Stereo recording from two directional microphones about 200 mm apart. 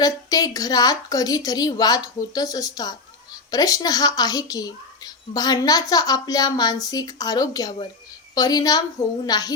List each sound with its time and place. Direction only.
0.0 s a woman's voice: 20° left (ahead or behind)